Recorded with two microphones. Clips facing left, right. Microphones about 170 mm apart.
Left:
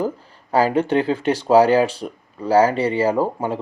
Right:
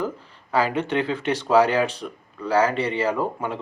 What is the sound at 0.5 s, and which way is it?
Speech, 35° left (ahead or behind).